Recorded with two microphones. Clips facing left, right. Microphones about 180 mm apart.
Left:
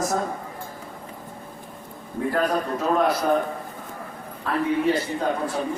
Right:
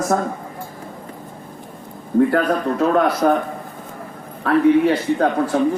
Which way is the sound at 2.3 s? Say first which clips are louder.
Right 5 dB; 65° right (ahead or behind).